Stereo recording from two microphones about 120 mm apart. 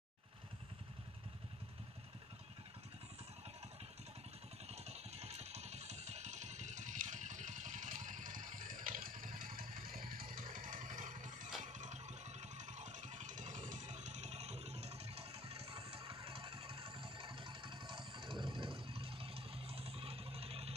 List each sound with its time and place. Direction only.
4.6 s vehicle: 60° right (ahead or behind); by 9.3 s 90° right
10.5 s a sound: 90° right
11.6 s vehicle: 75° right (ahead or behind); by 20.7 s 55° right (ahead or behind)